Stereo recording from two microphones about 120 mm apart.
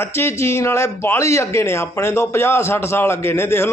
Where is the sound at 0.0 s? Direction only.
20° left (ahead or behind).